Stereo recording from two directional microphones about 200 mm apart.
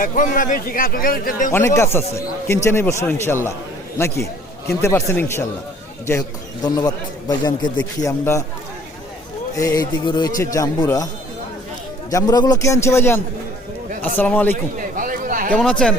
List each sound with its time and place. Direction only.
0.0 s a man's voice: 40° left (ahead or behind)
1.5 s a man's voice: 15° left (ahead or behind)
9.6 s a man's voice: 20° left (ahead or behind)
12.1 s a man's voice: 20° left (ahead or behind)
14.8 s a sound: 45° right (ahead or behind)
15.5 s speech: 5° left (ahead or behind)